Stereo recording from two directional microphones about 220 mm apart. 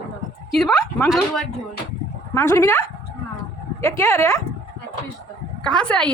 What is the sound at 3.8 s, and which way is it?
Speech, 15° left (ahead or behind).